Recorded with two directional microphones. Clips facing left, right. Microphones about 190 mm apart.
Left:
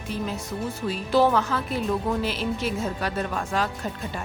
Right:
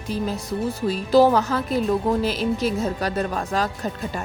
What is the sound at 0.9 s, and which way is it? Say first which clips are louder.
Speech: right 4 dB; 40° right (ahead or behind).